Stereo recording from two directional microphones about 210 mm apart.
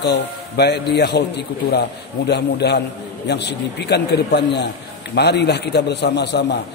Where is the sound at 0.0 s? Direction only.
55° left (ahead or behind).